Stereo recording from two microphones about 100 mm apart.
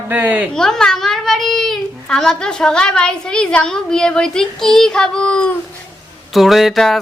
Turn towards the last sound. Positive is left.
turn(degrees=0)  # may be behind; listen again after turning